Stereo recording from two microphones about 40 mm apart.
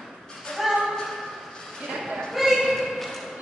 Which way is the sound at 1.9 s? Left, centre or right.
Centre.